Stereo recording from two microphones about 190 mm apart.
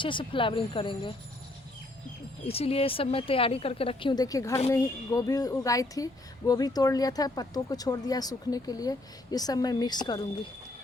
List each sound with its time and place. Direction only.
0.0 s speech: 25° left (ahead or behind)
2.5 s speech: 30° left (ahead or behind)